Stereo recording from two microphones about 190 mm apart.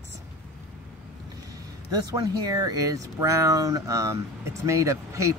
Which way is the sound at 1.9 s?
20° right (ahead or behind).